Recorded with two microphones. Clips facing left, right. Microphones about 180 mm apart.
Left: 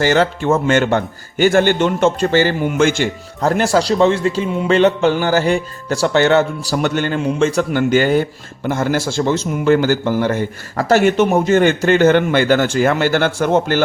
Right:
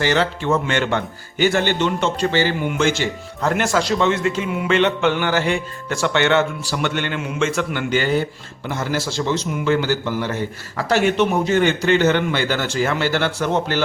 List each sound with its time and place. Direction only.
0.0 s speech: 45° left (ahead or behind)
3.5 s a man's voice: 35° left (ahead or behind)